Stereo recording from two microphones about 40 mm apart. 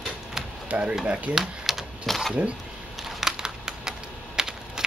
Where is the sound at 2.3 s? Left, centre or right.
Right.